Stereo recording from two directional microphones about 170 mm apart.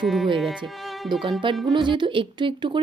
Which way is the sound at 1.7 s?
30° right (ahead or behind).